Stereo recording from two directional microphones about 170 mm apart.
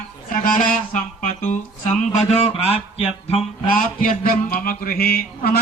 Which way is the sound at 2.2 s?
40° left (ahead or behind).